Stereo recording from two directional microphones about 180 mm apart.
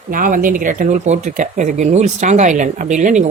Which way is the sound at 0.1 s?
50° right (ahead or behind).